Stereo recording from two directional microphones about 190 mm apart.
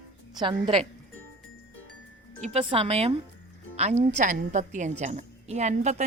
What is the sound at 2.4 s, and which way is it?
A woman's voice, 30° right (ahead or behind).